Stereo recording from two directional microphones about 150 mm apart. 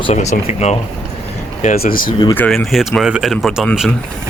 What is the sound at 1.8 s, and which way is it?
Speech, 70° left (ahead or behind).